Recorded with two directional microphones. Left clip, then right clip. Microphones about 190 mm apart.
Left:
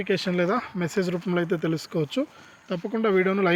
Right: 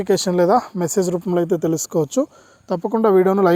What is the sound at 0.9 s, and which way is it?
Speech, 15° right (ahead or behind).